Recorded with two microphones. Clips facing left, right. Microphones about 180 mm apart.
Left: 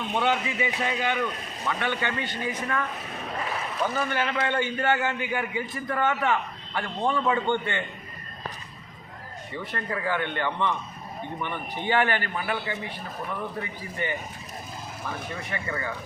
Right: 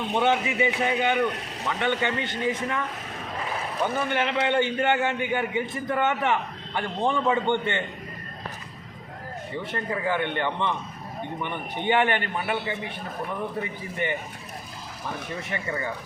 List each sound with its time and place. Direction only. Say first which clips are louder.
0.2 s a man's voice: right 3 dB; 25° right (ahead or behind)
3.8 s a man's voice: right 2 dB; 20° right (ahead or behind)
9.7 s a man's voice: right 2 dB; 20° right (ahead or behind)
15.4 s a man's voice: right 2 dB; 25° right (ahead or behind)